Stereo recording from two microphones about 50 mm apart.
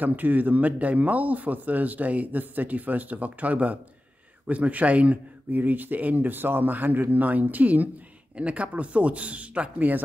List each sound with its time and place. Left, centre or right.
0.0 s speech: right